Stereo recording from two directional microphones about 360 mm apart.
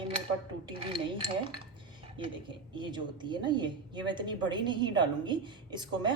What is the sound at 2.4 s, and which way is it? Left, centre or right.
A woman's voice, centre.